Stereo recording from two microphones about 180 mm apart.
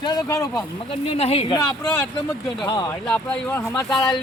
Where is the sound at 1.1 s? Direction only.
35° left (ahead or behind).